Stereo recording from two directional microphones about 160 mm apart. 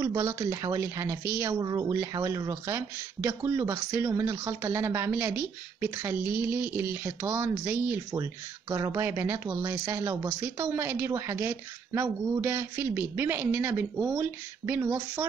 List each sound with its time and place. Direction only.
0.0 s speech: 20° right (ahead or behind)